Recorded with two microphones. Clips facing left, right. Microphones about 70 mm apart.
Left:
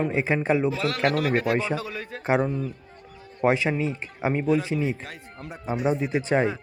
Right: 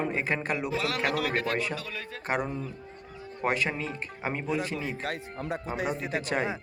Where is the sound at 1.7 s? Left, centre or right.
Left.